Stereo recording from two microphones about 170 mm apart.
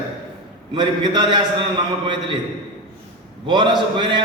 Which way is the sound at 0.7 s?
25° right (ahead or behind).